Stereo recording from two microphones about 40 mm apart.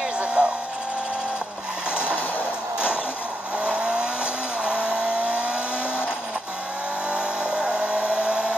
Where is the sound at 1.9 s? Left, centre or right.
Right.